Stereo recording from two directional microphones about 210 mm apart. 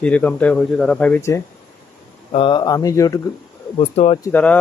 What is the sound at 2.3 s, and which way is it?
Speech, 25° left (ahead or behind).